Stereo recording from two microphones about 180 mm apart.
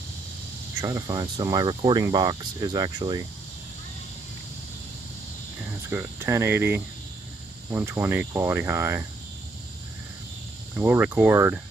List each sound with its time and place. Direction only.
0.7 s speech: 20° right (ahead or behind)
5.9 s speech: 10° right (ahead or behind)
10.8 s speech: 10° right (ahead or behind)